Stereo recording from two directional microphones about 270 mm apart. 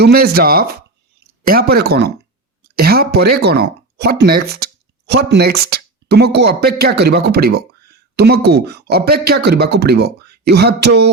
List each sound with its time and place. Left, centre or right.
0.0 s speech: right